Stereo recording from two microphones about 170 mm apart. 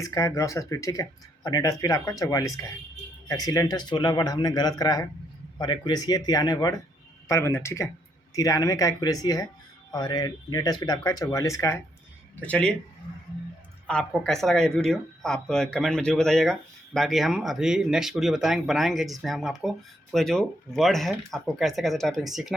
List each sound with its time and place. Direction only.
0.0 s speech: 20° left (ahead or behind)
12.4 s speech: 5° left (ahead or behind)
13.8 s speech: 5° left (ahead or behind)